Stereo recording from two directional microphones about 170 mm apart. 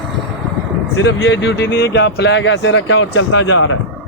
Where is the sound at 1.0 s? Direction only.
90° left.